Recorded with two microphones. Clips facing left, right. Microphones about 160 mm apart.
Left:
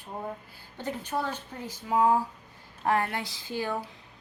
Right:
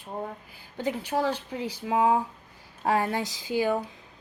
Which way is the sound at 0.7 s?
10° right (ahead or behind).